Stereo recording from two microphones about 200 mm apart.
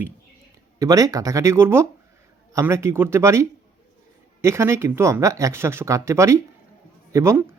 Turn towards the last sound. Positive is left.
turn(degrees=-15)  # may be behind; listen again after turning